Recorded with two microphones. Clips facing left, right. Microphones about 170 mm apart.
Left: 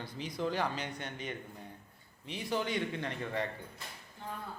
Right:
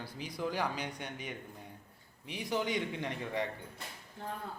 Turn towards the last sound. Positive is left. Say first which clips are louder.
# even
turn(degrees=-15)  # may be behind; listen again after turning